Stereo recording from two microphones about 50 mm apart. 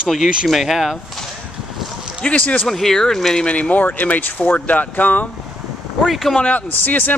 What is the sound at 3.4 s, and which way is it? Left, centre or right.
Speech, left.